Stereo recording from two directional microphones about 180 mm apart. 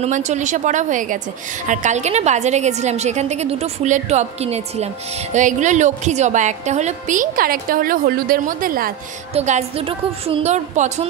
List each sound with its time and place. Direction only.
0.0 s a woman's voice: 40° right (ahead or behind)
9.3 s a woman's voice: 35° right (ahead or behind)